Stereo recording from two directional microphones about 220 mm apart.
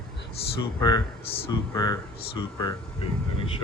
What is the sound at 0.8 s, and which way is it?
Speech, 20° left (ahead or behind).